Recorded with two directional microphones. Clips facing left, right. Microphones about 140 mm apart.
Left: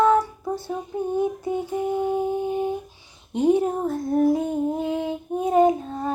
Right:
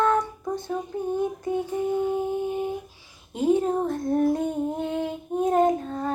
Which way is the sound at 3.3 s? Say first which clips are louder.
Left 3 dB; 25° left (ahead or behind).